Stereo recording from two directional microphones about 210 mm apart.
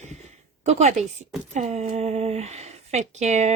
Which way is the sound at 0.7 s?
30° right (ahead or behind).